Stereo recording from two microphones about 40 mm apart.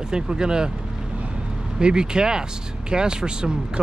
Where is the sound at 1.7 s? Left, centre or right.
Right.